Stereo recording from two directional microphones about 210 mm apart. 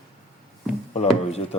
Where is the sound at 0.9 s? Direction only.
30° left (ahead or behind).